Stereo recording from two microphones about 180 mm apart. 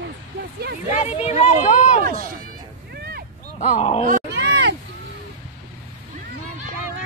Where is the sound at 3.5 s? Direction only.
40° left (ahead or behind).